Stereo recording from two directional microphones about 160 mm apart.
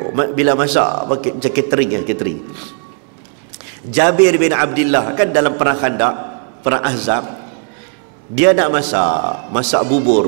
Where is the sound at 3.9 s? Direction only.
10° right (ahead or behind).